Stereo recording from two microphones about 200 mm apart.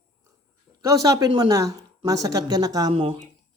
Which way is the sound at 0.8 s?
15° right (ahead or behind).